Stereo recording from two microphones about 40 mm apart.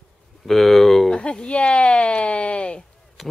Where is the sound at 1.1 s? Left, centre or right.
Left.